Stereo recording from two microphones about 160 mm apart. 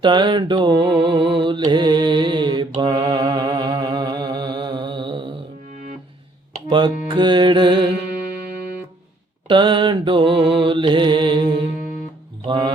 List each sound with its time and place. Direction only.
0.0 s mantra: 30° right (ahead or behind)
6.7 s mantra: 30° right (ahead or behind)
8.1 s music: 70° right (ahead or behind)
9.5 s mantra: 30° right (ahead or behind)
12.5 s speech: 30° right (ahead or behind)